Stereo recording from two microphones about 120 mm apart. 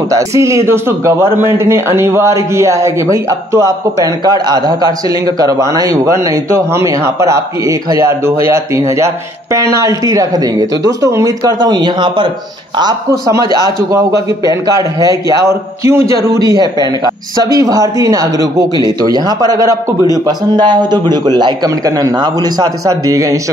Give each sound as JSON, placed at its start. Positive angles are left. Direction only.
{"t": 0.1, "sound": "speech", "side_deg": -25}
{"t": 13.3, "sound": "a man's voice", "side_deg": -30}